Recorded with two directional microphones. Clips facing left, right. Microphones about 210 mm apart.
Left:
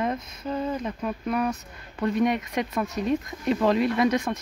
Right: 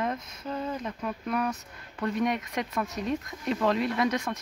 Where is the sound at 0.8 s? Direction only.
10° left (ahead or behind).